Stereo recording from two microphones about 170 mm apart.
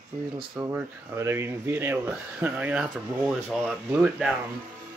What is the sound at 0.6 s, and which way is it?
Speech, 15° right (ahead or behind).